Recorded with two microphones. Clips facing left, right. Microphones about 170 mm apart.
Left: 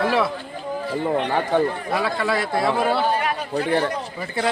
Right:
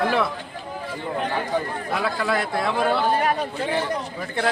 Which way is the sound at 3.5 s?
55° left (ahead or behind).